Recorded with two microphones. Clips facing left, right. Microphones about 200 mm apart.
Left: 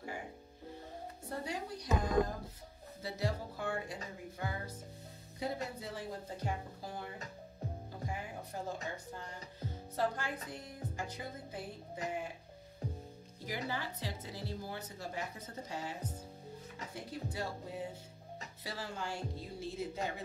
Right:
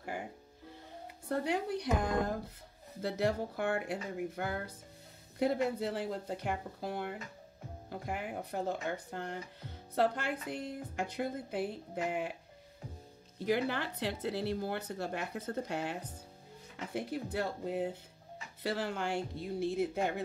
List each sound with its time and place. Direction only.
1.3 s speech: 65° right (ahead or behind)
13.5 s speech: 70° right (ahead or behind)
16.7 s speech: 60° right (ahead or behind)